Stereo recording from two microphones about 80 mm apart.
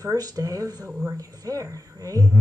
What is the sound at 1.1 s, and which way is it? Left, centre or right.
A woman's voice, right.